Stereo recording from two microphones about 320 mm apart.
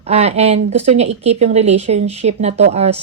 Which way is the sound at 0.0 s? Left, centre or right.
Centre.